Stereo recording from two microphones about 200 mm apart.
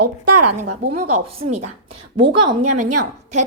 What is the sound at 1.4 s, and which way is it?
A woman's voice, 30° right (ahead or behind).